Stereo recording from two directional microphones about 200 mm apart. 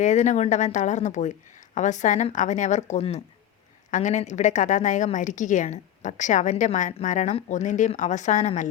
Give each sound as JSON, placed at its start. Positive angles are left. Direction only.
{"t": 0.0, "sound": "a woman's voice", "side_deg": 35}